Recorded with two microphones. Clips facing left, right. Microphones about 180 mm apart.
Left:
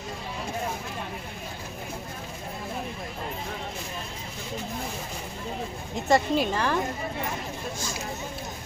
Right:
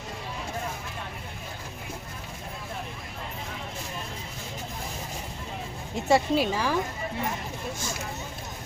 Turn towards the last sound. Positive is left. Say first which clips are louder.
# even
turn(degrees=-10)  # may be behind; listen again after turning